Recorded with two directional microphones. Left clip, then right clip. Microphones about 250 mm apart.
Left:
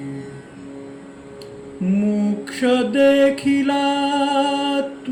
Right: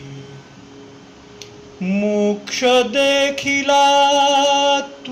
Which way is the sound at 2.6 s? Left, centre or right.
Centre.